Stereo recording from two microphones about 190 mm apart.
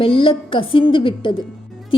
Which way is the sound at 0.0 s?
25° left (ahead or behind).